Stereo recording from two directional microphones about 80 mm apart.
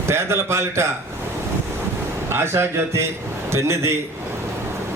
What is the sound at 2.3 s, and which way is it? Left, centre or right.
A man's voice, right.